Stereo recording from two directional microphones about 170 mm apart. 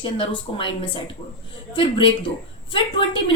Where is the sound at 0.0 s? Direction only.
30° left (ahead or behind).